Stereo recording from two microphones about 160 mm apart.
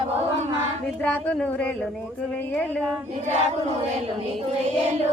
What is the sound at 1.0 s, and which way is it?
Speech, 10° left (ahead or behind).